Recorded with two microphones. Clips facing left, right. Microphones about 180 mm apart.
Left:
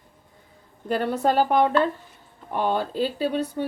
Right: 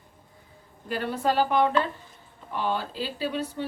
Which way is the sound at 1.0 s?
50° left (ahead or behind).